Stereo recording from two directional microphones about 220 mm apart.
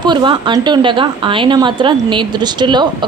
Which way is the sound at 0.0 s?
20° right (ahead or behind).